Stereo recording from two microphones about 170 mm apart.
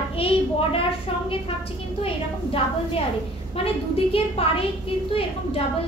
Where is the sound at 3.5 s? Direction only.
35° left (ahead or behind).